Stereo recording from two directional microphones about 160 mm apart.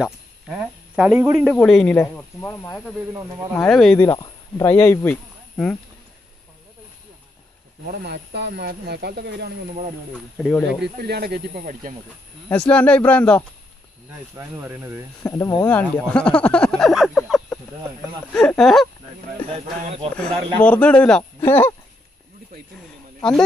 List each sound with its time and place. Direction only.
0.0 s speech: 5° right (ahead or behind)
1.6 s speech: 5° left (ahead or behind)
3.1 s speech: 15° right (ahead or behind)
3.5 s speech: 5° left (ahead or behind)
4.6 s speech: 15° left (ahead or behind)
7.8 s speech: 80° right
10.1 s speech: 5° left (ahead or behind)
10.8 s speech: 85° right
11.6 s speech: 55° right (ahead or behind)
12.4 s speech: 10° left (ahead or behind)
14.3 s speech: 15° right (ahead or behind)
15.2 s speech: 20° left (ahead or behind); by 18.9 s centre (ahead or behind)
19.9 s speech: 35° right (ahead or behind)
20.5 s speech: 10° left (ahead or behind)